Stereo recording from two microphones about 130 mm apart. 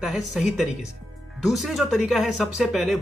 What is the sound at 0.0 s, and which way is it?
Speech, centre (ahead or behind).